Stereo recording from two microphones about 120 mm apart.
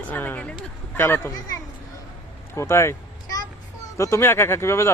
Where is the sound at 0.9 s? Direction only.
20° left (ahead or behind).